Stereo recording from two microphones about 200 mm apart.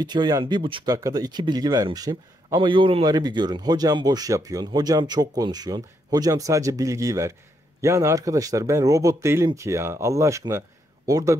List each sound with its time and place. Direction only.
0.0 s speech: 20° right (ahead or behind)